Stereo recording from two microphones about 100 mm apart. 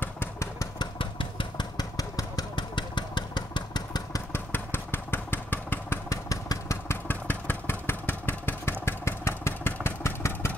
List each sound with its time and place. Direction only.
0.0 s engine: 20° left (ahead or behind)
0.9 s engine: 55° left (ahead or behind)
1.8 s vehicle: 40° left (ahead or behind)
4.3 s vehicle: 20° left (ahead or behind)
6.0 s engine: 35° left (ahead or behind)